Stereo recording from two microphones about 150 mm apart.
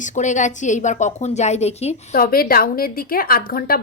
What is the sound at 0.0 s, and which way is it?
A woman's voice, 55° left (ahead or behind).